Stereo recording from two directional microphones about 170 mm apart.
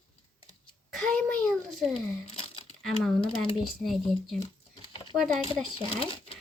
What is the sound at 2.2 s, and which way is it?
Crumpling, 35° left (ahead or behind).